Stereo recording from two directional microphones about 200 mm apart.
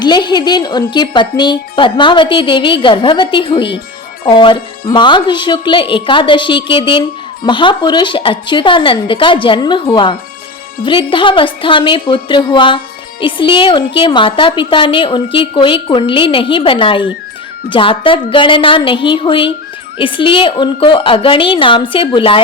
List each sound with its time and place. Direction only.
0.0 s speech: 20° left (ahead or behind)